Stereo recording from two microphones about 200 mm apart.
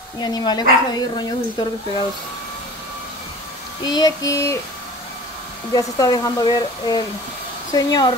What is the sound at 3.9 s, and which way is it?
Speech, 20° left (ahead or behind).